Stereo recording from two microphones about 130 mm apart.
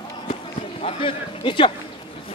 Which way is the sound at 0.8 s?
45° left (ahead or behind).